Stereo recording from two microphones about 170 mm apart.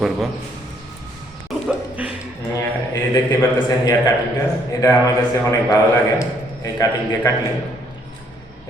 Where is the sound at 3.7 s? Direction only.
20° left (ahead or behind).